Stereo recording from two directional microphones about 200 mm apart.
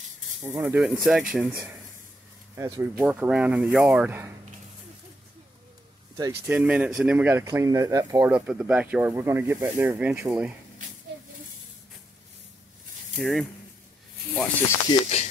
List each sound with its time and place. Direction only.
0.4 s speech: 10° right (ahead or behind)
6.1 s speech: 15° right (ahead or behind)
13.2 s speech: centre (ahead or behind)
14.9 s speech: 30° left (ahead or behind)